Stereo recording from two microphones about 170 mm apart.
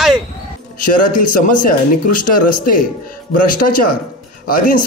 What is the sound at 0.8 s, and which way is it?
A man's voice, 55° left (ahead or behind).